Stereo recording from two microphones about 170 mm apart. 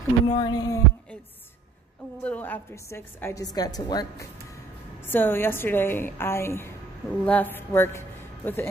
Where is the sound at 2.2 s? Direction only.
10° left (ahead or behind).